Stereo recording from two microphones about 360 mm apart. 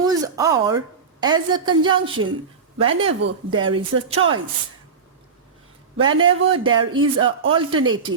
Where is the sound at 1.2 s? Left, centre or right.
Centre.